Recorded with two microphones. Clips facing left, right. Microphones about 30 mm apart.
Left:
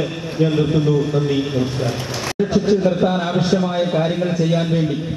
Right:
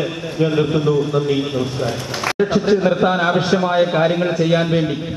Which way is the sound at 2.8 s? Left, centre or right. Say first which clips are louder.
Right 2 dB; right.